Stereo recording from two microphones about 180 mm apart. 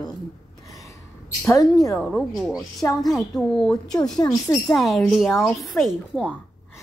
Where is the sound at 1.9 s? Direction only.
5° left (ahead or behind).